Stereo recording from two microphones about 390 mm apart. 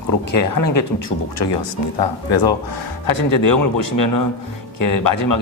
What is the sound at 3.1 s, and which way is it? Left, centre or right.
Speech, left.